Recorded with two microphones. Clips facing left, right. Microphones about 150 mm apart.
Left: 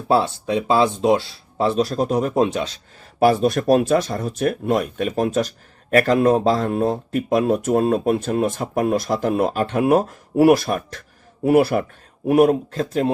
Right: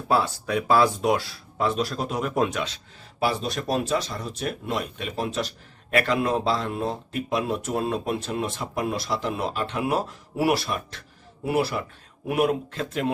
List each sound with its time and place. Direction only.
0.1 s speech: 25° left (ahead or behind)
2.3 s speech: 25° left (ahead or behind)
2.6 s speech: 45° left (ahead or behind)
12.3 s speech: 40° left (ahead or behind)